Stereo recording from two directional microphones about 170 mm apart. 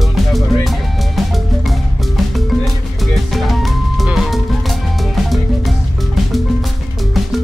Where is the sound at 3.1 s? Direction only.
Centre (ahead or behind).